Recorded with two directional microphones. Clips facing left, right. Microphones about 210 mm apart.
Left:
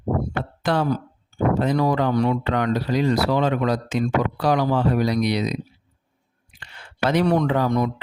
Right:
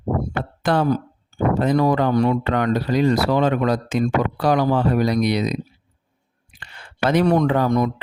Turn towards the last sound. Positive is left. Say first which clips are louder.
# right 2 dB
turn(degrees=-45)  # may be behind; listen again after turning